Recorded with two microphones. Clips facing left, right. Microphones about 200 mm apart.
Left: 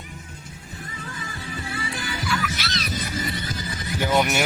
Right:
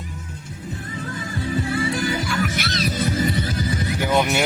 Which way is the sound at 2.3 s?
55° right (ahead or behind).